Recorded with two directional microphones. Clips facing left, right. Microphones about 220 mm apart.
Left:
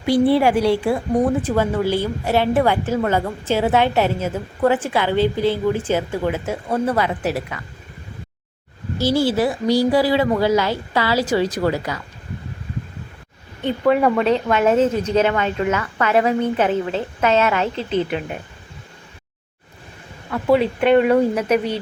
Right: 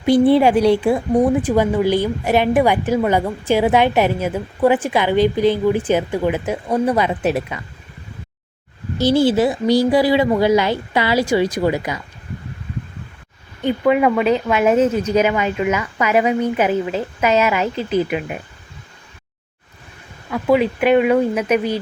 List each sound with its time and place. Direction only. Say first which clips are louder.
0.0 s a woman's voice: right 3 dB; 20° right (ahead or behind)
9.0 s a woman's voice: right 3 dB; 20° right (ahead or behind)
13.6 s a woman's voice: right 1 dB; 5° right (ahead or behind)
20.8 s a woman's voice: left 1 dB; 5° right (ahead or behind)